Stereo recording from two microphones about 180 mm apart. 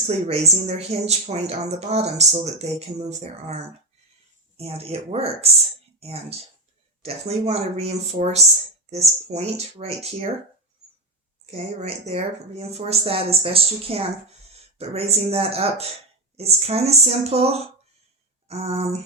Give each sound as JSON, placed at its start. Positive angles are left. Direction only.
{"t": 0.1, "sound": "speech", "side_deg": -35}
{"t": 7.0, "sound": "speech", "side_deg": -35}
{"t": 11.5, "sound": "speech", "side_deg": -35}